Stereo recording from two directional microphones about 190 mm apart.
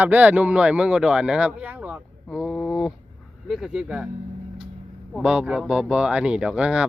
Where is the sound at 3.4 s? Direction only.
Centre (ahead or behind).